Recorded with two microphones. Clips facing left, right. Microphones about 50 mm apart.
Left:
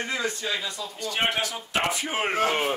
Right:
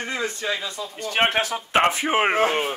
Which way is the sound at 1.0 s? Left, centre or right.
Right.